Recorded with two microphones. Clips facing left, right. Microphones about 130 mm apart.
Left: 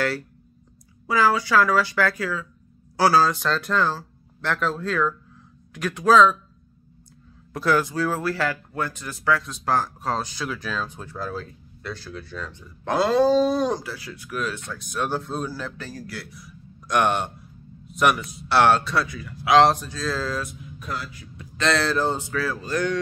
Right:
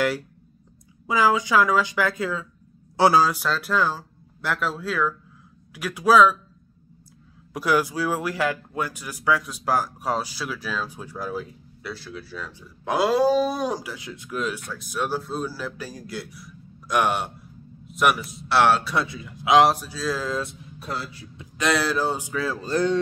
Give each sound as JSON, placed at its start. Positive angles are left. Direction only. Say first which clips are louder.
{"t": 1.0, "sound": "speech", "louder": "even", "side_deg": -15}
{"t": 7.5, "sound": "speech", "louder": "left 1 dB", "side_deg": -10}
{"t": 14.5, "sound": "speech", "louder": "right 1 dB", "side_deg": -5}
{"t": 15.9, "sound": "speech", "louder": "right 1 dB", "side_deg": -15}
{"t": 16.3, "sound": "speech", "louder": "even", "side_deg": -5}
{"t": 18.9, "sound": "speech", "louder": "left 1 dB", "side_deg": -20}
{"t": 19.7, "sound": "speech", "louder": "even", "side_deg": -5}
{"t": 21.5, "sound": "speech", "louder": "left 1 dB", "side_deg": -10}